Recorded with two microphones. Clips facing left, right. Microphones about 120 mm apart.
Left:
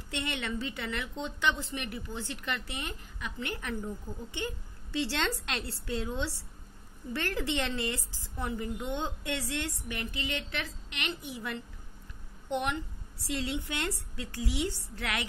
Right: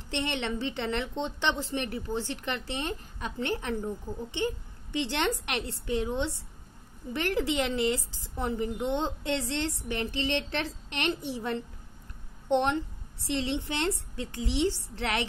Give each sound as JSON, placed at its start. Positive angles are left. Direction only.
{"t": 0.1, "sound": "a woman's voice", "side_deg": -25}